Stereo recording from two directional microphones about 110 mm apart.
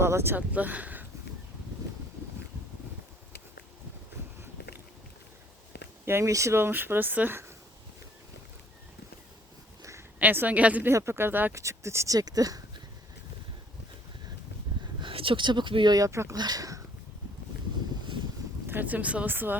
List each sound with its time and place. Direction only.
0.0 s speech: 20° right (ahead or behind)
6.1 s speech: 25° right (ahead or behind)
10.2 s speech: 15° right (ahead or behind); by 12.6 s 35° right (ahead or behind)
15.0 s speech: 55° right (ahead or behind); by 16.8 s 30° right (ahead or behind)
18.7 s speech: 15° right (ahead or behind)